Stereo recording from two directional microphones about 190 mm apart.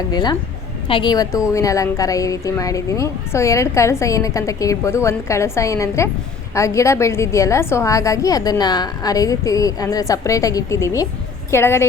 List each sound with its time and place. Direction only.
0.1 s a woman's voice: 20° left (ahead or behind)